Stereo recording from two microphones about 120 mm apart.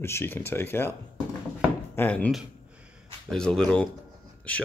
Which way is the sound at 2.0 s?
10° left (ahead or behind).